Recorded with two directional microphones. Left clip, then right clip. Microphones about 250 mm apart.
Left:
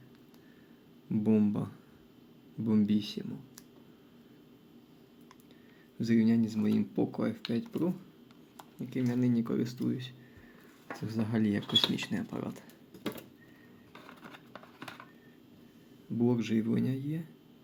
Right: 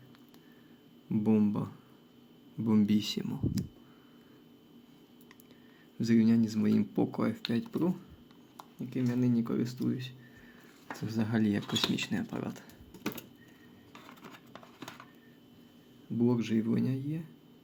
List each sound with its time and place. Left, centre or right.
1.1 s speech: centre
2.6 s speech: centre
6.0 s speech: centre
8.5 s speech: centre
13.0 s typewriter: right
16.1 s speech: centre